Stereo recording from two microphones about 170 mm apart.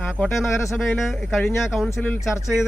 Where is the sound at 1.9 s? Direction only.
15° left (ahead or behind).